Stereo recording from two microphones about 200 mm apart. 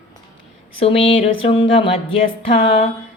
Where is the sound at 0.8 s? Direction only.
30° left (ahead or behind).